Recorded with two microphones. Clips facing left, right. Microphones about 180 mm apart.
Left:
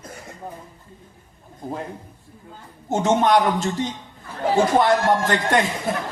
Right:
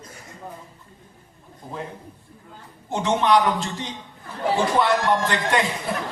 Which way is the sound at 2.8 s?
45° left (ahead or behind).